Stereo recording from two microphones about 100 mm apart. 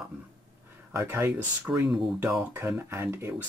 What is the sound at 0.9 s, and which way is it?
Speech, 20° right (ahead or behind).